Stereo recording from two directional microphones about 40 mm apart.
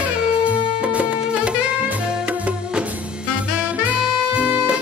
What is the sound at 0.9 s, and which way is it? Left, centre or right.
Music, right.